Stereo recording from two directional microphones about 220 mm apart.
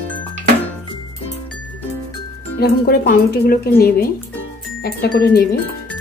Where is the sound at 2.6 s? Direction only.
45° left (ahead or behind).